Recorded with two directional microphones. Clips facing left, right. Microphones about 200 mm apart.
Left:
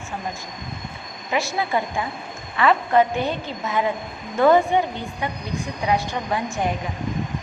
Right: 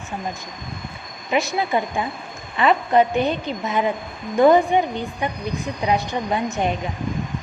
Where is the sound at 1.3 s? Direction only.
20° right (ahead or behind).